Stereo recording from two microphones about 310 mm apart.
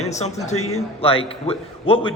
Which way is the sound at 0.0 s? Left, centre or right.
Left.